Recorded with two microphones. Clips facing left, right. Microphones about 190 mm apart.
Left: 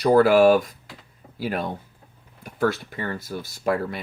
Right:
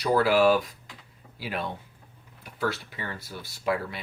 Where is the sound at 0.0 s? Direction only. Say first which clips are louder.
Left 6 dB; 50° left (ahead or behind).